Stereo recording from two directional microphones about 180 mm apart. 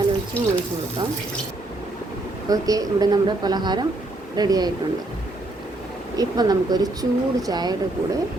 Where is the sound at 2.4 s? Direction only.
20° right (ahead or behind).